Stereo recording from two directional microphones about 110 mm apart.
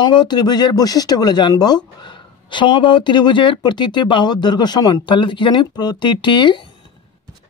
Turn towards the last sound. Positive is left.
turn(degrees=45)  # may be behind; listen again after turning